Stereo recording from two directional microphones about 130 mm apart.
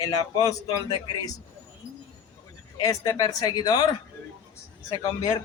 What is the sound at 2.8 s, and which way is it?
A man's voice, 30° left (ahead or behind).